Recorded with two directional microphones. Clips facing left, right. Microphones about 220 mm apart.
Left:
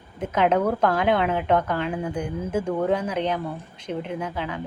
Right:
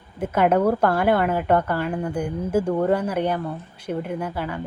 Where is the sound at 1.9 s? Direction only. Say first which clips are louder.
Right 2 dB; 5° left (ahead or behind).